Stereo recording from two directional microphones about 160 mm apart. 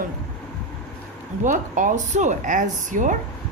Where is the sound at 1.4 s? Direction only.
55° right (ahead or behind).